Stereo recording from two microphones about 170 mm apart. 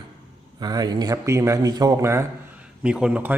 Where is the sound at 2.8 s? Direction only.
5° right (ahead or behind).